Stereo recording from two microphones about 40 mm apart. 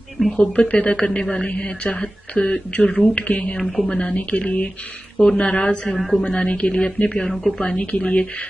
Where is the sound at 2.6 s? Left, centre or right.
Left.